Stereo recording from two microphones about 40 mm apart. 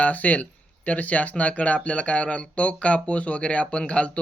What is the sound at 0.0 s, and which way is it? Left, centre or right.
Speech, left.